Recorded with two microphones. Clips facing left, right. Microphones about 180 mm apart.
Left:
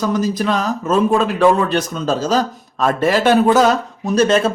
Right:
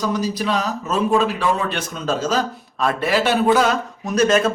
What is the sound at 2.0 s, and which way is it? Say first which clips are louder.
A man's voice: left 1 dB; 35° left (ahead or behind).